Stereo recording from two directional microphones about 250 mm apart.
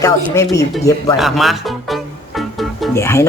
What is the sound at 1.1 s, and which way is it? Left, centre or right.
Music, centre.